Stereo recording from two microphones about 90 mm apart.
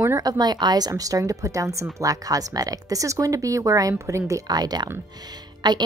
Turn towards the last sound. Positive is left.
turn(degrees=-55)  # may be behind; listen again after turning